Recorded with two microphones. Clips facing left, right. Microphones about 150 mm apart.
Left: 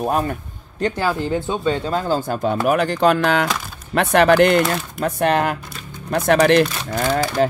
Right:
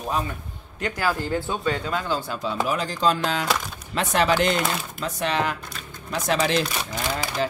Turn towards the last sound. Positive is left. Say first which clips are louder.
# left 8 dB
turn(degrees=50)  # may be behind; listen again after turning